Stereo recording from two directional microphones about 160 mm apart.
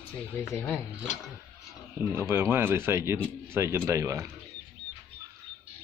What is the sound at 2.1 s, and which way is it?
Speech, 15° right (ahead or behind).